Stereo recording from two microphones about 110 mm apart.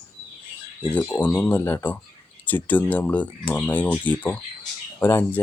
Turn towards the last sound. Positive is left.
turn(degrees=20)  # may be behind; listen again after turning